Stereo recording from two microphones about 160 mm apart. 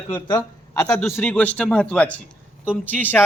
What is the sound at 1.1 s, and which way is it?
A man's voice, 10° left (ahead or behind).